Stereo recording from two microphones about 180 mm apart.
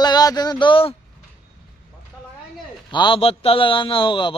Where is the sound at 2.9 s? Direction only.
25° left (ahead or behind).